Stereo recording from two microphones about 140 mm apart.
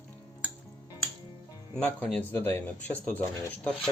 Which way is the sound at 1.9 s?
5° left (ahead or behind).